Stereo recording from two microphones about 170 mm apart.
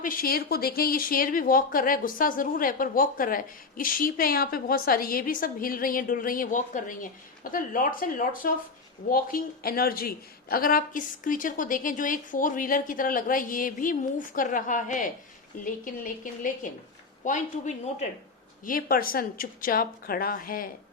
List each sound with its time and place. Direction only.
0.0 s speech: 55° left (ahead or behind)